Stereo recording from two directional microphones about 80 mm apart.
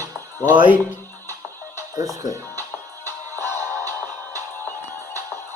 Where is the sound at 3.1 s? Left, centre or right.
Left.